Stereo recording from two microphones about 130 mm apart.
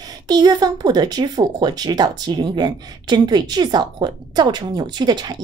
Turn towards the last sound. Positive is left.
turn(degrees=-35)  # may be behind; listen again after turning